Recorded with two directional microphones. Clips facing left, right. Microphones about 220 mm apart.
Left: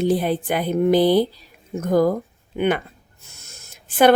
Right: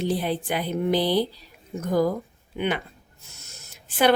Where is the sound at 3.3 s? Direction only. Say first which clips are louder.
Left 2 dB; 50° left (ahead or behind).